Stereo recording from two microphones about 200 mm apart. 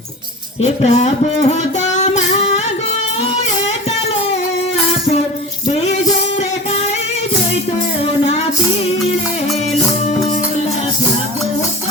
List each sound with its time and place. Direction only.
0.6 s music: 35° left (ahead or behind)
5.9 s music: 35° left (ahead or behind)
8.2 s music: 30° left (ahead or behind)